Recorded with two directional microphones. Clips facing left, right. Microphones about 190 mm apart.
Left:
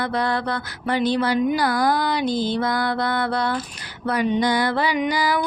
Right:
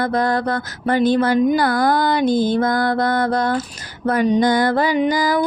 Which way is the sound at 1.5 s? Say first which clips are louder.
Right 4 dB; 55° right (ahead or behind).